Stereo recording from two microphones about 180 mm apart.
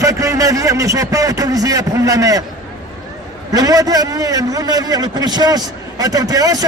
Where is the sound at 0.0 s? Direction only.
20° right (ahead or behind).